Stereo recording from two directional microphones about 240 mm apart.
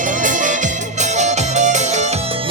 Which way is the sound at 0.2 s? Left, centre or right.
Right.